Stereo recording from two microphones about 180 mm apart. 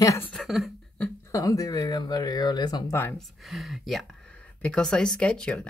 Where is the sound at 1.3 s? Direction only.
20° left (ahead or behind).